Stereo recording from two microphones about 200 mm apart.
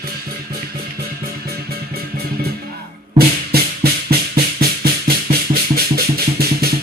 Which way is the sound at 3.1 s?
50° right (ahead or behind).